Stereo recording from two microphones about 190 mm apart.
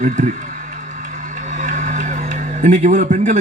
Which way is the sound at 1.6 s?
40° right (ahead or behind).